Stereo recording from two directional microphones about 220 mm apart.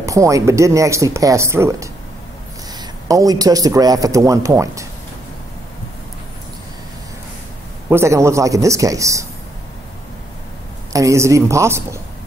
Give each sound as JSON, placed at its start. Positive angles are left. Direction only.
{"t": 0.0, "sound": "speech", "side_deg": -15}
{"t": 3.1, "sound": "speech", "side_deg": -15}
{"t": 7.9, "sound": "speech", "side_deg": -10}
{"t": 10.9, "sound": "speech", "side_deg": -15}